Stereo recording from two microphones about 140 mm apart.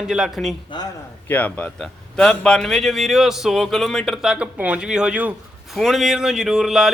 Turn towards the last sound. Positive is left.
turn(degrees=-5)  # may be behind; listen again after turning